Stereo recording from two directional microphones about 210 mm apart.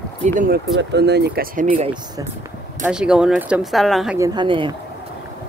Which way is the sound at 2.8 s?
5° right (ahead or behind).